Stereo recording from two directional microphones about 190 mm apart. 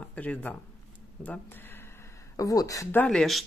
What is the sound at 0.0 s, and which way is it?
Speech, 5° left (ahead or behind).